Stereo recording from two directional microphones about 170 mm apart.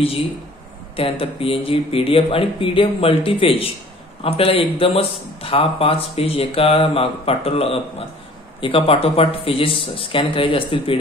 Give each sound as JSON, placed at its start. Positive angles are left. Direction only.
{"t": 0.9, "sound": "speech", "side_deg": 35}